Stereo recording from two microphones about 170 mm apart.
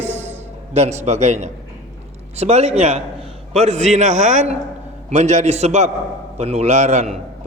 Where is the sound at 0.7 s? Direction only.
40° right (ahead or behind).